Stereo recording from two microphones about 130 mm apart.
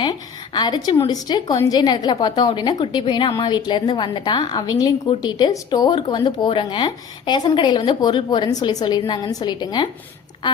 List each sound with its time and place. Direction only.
0.0 s a woman's voice: 35° left (ahead or behind)